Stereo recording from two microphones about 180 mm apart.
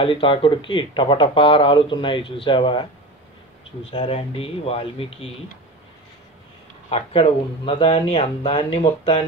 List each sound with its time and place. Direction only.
0.0 s speech: 30° left (ahead or behind)
3.9 s speech: 30° left (ahead or behind)
6.9 s speech: 35° left (ahead or behind)